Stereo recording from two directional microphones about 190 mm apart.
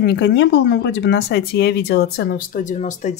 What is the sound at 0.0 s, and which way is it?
Speech, 60° left (ahead or behind).